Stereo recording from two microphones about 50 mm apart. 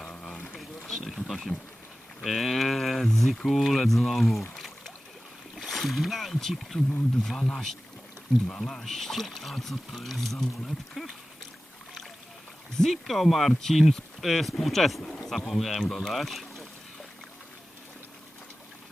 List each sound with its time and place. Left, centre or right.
0.0 s a sound: centre
0.5 s a sound: centre
2.2 s speech: centre
5.5 s speech: centre
11.0 s speech: centre
12.7 s speech: centre